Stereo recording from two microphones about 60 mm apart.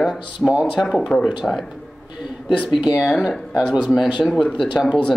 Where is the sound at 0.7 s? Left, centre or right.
Centre.